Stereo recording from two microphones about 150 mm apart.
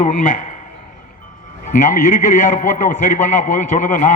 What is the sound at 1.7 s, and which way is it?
A man's voice, 60° left (ahead or behind).